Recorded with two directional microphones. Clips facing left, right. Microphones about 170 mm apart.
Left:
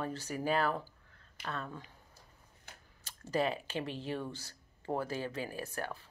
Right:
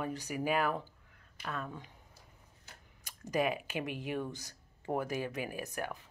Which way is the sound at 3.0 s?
15° right (ahead or behind).